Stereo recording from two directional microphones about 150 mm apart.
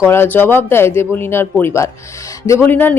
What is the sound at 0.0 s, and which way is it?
Speech, 15° left (ahead or behind).